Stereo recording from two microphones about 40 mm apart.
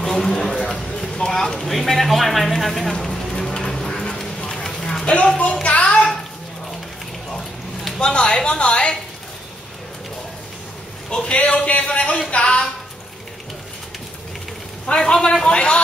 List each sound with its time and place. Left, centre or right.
0.0 s speech: centre
0.7 s a sound: centre
1.0 s speech: centre
3.3 s music: centre
4.5 s a sound: centre
5.0 s a woman's voice: left
8.0 s a man's voice: left
11.1 s a man's voice: left
15.0 s a man's voice: centre